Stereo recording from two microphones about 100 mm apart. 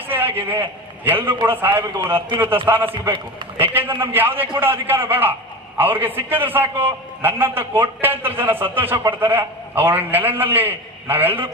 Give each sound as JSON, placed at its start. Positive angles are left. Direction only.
{"t": 0.1, "sound": "a man's voice", "side_deg": -20}